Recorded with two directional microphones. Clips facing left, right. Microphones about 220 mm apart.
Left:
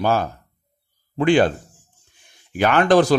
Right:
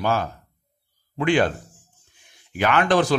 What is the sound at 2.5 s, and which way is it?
Speech, 40° left (ahead or behind).